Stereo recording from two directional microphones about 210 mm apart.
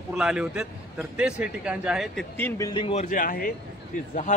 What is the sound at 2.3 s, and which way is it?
A man's voice, 10° left (ahead or behind).